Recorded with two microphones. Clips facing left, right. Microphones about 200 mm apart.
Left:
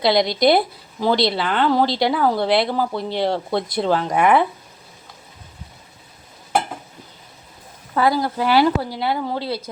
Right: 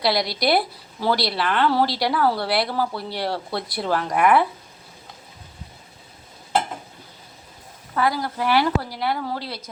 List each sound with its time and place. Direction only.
0.0 s speech: 20° left (ahead or behind)
7.9 s speech: 30° left (ahead or behind)